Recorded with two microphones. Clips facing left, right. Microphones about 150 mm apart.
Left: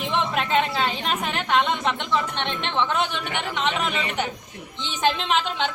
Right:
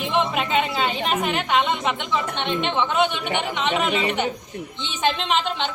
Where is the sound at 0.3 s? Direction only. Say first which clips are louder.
Even; 5° right (ahead or behind).